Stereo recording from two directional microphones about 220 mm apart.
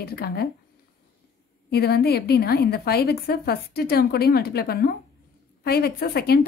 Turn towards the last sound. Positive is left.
turn(degrees=45)  # may be behind; listen again after turning